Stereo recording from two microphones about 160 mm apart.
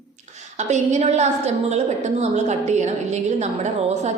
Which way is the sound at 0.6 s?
45° right (ahead or behind).